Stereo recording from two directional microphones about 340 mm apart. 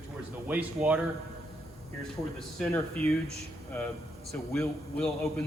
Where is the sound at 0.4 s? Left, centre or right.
Centre.